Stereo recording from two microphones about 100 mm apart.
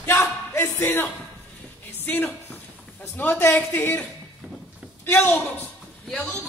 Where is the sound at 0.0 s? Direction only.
25° left (ahead or behind).